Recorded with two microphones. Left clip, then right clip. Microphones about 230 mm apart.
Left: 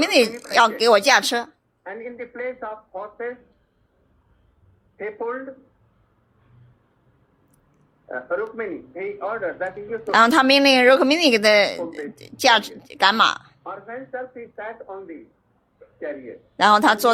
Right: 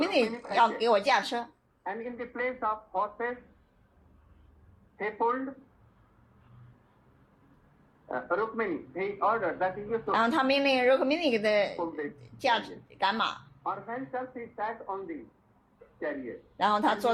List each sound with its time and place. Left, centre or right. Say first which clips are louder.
0.0 s a woman's voice: left 9 dB; left
1.8 s a man's voice: left 3 dB; right
4.9 s a man's voice: left 1 dB; right
8.0 s a man's voice: left 4 dB; right
10.1 s a woman's voice: left 11 dB; left
13.7 s a man's voice: left 1 dB; right
16.6 s a woman's voice: left 11 dB; left